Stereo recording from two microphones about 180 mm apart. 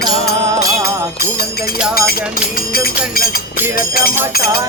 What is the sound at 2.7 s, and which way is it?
Music, 55° left (ahead or behind).